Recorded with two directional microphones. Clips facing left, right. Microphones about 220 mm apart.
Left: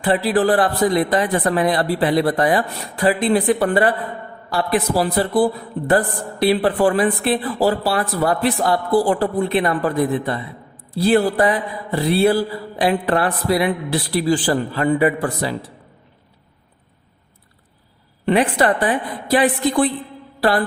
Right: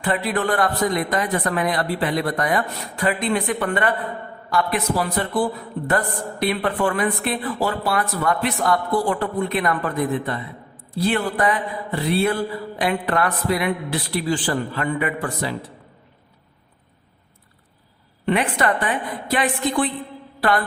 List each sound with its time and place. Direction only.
0.0 s a woman's voice: 30° left (ahead or behind)
18.3 s a woman's voice: 35° left (ahead or behind)